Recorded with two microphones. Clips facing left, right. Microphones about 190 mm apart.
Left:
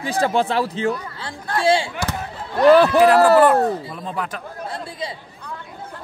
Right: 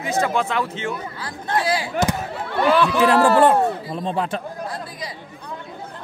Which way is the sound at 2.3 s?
65° right (ahead or behind).